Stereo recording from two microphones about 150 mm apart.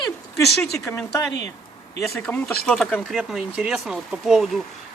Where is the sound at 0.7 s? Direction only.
20° left (ahead or behind).